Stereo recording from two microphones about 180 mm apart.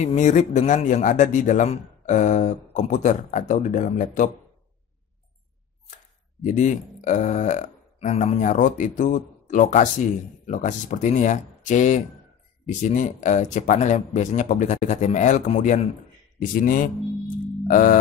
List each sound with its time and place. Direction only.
0.0 s speech: 40° left (ahead or behind)
6.4 s speech: 45° left (ahead or behind)
16.3 s speech: 50° left (ahead or behind)
17.6 s a sound: 50° left (ahead or behind)